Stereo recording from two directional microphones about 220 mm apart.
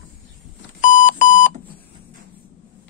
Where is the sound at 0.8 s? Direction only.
35° left (ahead or behind).